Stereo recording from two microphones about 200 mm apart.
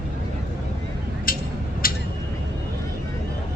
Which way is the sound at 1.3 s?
45° left (ahead or behind).